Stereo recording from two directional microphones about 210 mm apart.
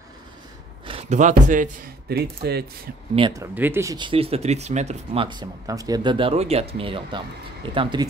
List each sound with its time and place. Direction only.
0.8 s speech: 30° right (ahead or behind); by 2.6 s 50° right (ahead or behind)
3.2 s speech: 20° right (ahead or behind)
3.5 s speech: 10° right (ahead or behind)